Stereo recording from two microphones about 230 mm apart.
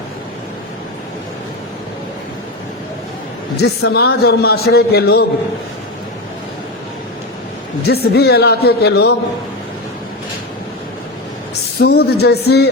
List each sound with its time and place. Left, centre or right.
3.6 s a man's voice: left
7.8 s a man's voice: left
11.8 s a man's voice: left